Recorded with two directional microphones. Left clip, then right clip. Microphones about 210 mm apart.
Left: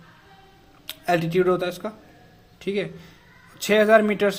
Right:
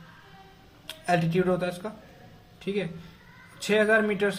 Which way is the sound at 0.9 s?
50° left (ahead or behind).